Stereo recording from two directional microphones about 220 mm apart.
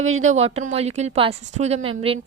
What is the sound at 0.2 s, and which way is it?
A woman's voice, 30° right (ahead or behind).